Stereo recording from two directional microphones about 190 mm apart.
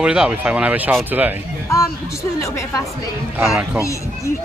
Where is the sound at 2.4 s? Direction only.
15° left (ahead or behind).